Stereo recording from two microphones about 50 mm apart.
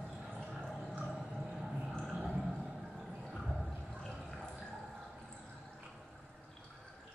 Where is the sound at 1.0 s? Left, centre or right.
Centre.